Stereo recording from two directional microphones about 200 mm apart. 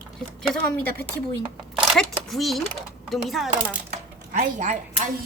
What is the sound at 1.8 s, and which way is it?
Speech, centre (ahead or behind).